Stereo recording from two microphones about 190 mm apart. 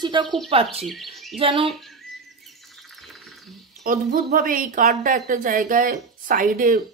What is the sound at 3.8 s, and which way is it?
A woman's voice, 50° right (ahead or behind).